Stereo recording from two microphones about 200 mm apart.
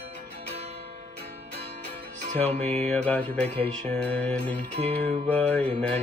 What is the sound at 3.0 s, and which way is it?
Music, 10° left (ahead or behind).